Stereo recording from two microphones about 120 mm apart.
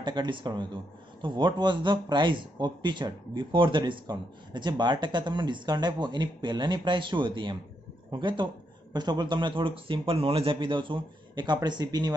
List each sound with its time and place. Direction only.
0.0 s speech: 40° right (ahead or behind)